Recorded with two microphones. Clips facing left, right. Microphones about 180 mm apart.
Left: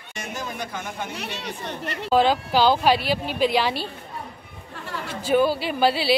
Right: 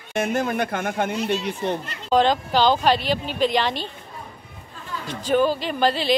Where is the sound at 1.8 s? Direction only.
65° left (ahead or behind).